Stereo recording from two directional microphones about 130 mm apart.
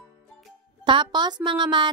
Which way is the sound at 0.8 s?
35° right (ahead or behind).